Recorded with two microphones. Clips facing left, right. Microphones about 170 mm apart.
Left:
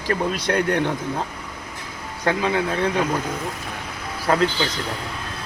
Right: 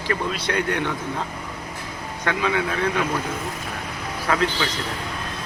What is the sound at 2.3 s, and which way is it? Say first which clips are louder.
Speech: left 2 dB; 30° left (ahead or behind).